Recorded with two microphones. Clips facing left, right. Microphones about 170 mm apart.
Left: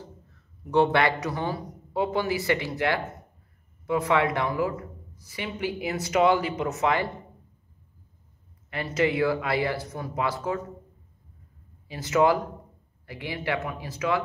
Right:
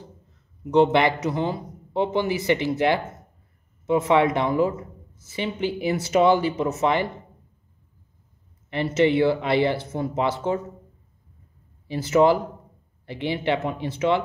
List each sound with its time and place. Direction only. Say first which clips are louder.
0.7 s speech: right 4 dB; 20° right (ahead or behind)
8.9 s speech: right 4 dB; 25° right (ahead or behind)
11.9 s speech: right 4 dB; 30° right (ahead or behind)